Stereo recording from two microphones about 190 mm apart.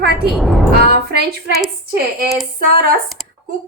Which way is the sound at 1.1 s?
60° right (ahead or behind).